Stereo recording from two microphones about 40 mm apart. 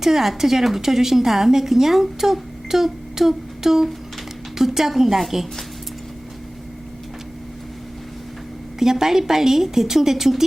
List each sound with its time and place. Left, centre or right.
0.0 s a woman's voice: centre
8.8 s a woman's voice: centre